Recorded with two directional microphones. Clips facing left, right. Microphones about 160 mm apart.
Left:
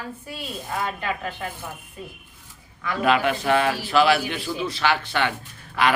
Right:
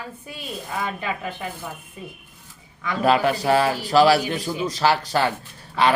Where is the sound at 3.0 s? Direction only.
35° right (ahead or behind).